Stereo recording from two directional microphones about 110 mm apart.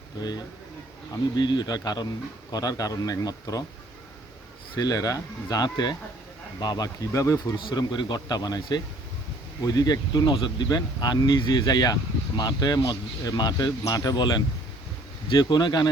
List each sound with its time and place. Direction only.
0.2 s speech: 40° left (ahead or behind)
4.8 s speech: 35° left (ahead or behind)